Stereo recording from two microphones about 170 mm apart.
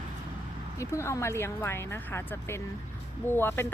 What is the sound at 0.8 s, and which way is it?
Speech, 15° left (ahead or behind).